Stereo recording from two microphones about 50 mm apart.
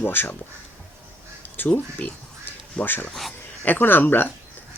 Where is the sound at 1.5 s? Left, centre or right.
Left.